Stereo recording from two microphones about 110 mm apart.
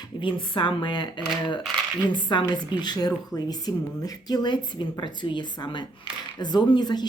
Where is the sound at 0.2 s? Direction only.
50° left (ahead or behind).